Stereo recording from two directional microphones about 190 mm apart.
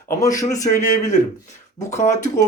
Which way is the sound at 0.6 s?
40° left (ahead or behind).